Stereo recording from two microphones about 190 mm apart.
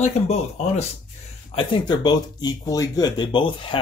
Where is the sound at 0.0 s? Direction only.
35° left (ahead or behind).